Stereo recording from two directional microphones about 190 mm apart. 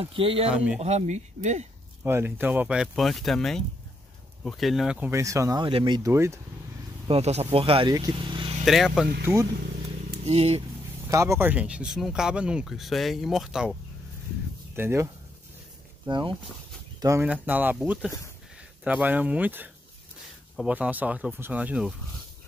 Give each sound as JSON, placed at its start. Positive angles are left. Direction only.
{"t": 0.0, "sound": "speech", "side_deg": -30}
{"t": 0.5, "sound": "speech", "side_deg": -5}
{"t": 0.7, "sound": "speech", "side_deg": -35}
{"t": 2.0, "sound": "speech", "side_deg": -10}
{"t": 5.1, "sound": "speech", "side_deg": -15}
{"t": 7.1, "sound": "speech", "side_deg": -35}
{"t": 8.6, "sound": "speech", "side_deg": 0}
{"t": 9.2, "sound": "speech", "side_deg": -15}
{"t": 10.2, "sound": "speech", "side_deg": -30}
{"t": 11.1, "sound": "speech", "side_deg": -15}
{"t": 14.8, "sound": "speech", "side_deg": -10}
{"t": 16.1, "sound": "speech", "side_deg": -25}
{"t": 17.0, "sound": "speech", "side_deg": -10}